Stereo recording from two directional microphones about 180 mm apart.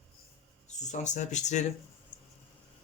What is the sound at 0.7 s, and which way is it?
Speech, 40° left (ahead or behind).